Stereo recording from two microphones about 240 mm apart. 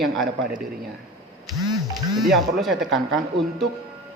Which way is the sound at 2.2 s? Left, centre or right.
Centre.